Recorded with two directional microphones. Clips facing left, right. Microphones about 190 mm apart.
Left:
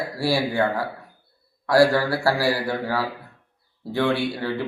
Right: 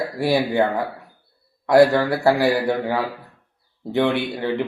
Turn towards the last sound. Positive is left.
turn(degrees=-20)  # may be behind; listen again after turning